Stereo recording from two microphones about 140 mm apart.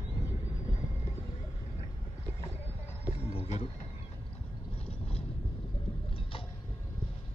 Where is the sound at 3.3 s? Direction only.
45° left (ahead or behind).